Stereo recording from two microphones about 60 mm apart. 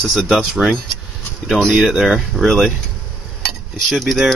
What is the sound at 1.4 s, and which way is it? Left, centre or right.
Speech, centre.